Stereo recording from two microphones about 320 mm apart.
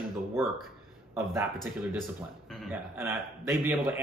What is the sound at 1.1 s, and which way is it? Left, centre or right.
Speech, centre.